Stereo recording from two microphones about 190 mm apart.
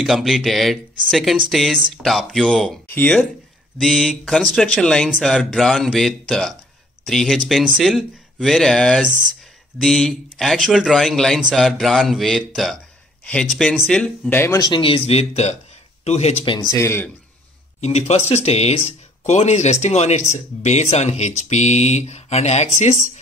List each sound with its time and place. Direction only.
0.0 s a man's voice: centre (ahead or behind)
14.7 s speech: 30° left (ahead or behind)
16.7 s a man's voice: 15° left (ahead or behind)
17.7 s speech: 35° left (ahead or behind)